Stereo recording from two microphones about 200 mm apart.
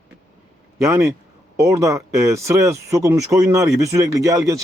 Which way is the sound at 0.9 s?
15° right (ahead or behind).